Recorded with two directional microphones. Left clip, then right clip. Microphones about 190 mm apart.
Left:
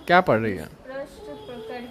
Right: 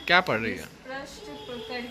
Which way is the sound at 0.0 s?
30° left (ahead or behind).